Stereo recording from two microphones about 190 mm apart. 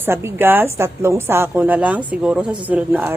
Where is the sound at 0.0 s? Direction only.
15° right (ahead or behind).